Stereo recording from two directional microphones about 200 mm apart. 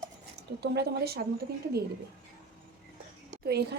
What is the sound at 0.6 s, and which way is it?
Speech, 55° right (ahead or behind).